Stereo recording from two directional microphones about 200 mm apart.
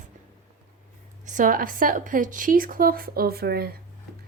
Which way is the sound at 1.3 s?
40° right (ahead or behind).